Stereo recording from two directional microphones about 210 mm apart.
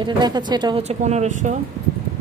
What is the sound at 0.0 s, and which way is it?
Speech, 20° right (ahead or behind).